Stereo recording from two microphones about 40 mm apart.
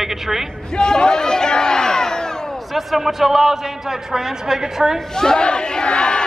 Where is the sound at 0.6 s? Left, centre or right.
Centre.